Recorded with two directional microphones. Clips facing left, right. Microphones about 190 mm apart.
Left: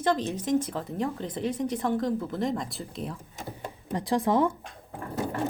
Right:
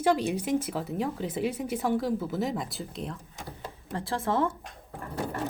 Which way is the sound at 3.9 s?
15° left (ahead or behind).